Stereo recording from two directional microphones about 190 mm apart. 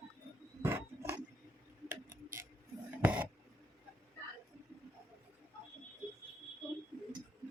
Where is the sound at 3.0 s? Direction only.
10° right (ahead or behind).